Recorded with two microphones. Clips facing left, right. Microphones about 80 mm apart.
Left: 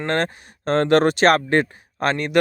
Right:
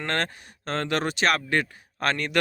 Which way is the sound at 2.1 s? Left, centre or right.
Centre.